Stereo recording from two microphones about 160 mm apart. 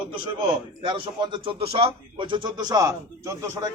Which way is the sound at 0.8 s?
30° right (ahead or behind).